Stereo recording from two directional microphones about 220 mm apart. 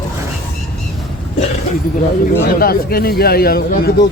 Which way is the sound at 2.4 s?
45° left (ahead or behind).